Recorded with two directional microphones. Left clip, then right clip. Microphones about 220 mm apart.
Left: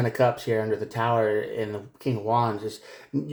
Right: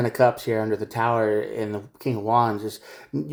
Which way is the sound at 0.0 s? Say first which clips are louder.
Right 3 dB; 35° right (ahead or behind).